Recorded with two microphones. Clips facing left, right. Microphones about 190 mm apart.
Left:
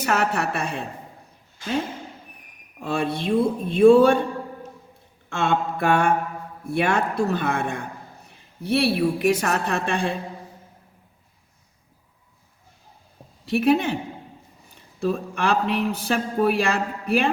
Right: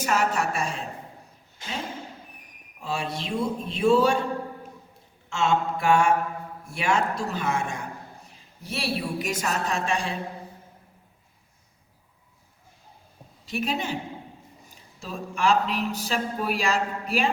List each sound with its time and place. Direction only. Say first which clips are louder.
0.0 s speech: left 2 dB; 60° left (ahead or behind)
2.8 s speech: left 6 dB; 55° left (ahead or behind)
5.3 s speech: left 1 dB; 60° left (ahead or behind)
13.4 s speech: left 10 dB; 60° left (ahead or behind)